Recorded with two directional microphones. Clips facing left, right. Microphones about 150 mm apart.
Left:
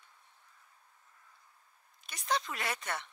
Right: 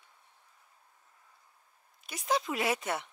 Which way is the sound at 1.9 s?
5° right (ahead or behind).